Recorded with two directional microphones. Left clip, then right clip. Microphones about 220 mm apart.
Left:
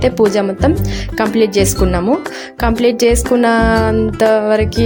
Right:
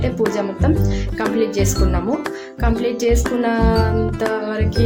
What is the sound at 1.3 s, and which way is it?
Music, 40° left (ahead or behind).